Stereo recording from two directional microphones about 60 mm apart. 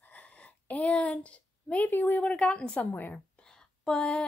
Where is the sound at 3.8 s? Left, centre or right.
Centre.